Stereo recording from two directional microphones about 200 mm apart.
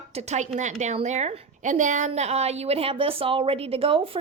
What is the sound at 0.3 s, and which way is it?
A woman's voice, 35° right (ahead or behind).